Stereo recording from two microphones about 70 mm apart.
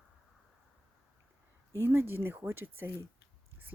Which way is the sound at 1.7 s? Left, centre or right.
Right.